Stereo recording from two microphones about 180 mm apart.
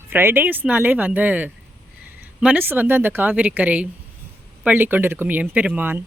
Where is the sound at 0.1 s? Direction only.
10° right (ahead or behind).